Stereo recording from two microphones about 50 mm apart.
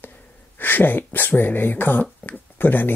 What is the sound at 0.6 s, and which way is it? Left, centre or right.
Speech, left.